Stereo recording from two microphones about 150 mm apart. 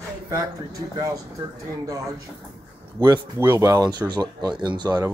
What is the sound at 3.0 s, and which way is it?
Speech, 20° right (ahead or behind).